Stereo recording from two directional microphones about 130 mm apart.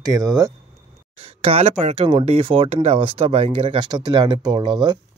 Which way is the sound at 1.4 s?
50° right (ahead or behind).